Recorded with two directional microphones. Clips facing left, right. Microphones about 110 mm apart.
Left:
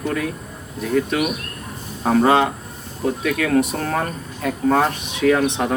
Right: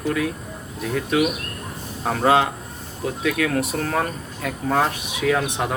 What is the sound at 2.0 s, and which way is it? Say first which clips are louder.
Speech: left 3 dB; centre (ahead or behind).